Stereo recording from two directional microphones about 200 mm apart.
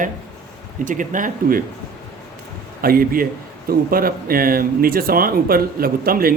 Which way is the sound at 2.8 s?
45° right (ahead or behind).